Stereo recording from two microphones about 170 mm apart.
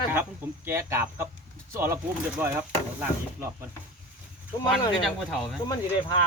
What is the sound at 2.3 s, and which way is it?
Speech, 10° right (ahead or behind).